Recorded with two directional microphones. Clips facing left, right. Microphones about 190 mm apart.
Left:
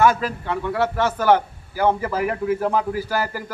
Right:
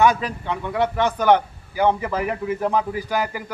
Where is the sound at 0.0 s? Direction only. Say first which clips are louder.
Even; 5° left (ahead or behind).